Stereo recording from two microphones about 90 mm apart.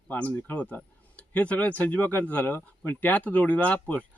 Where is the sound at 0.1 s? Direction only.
20° left (ahead or behind).